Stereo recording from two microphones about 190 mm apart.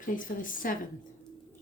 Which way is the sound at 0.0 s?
45° left (ahead or behind).